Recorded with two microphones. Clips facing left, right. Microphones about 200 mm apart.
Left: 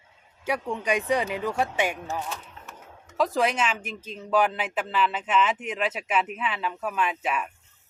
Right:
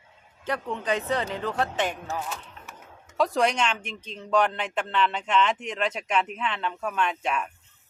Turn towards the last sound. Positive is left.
turn(degrees=5)  # may be behind; listen again after turning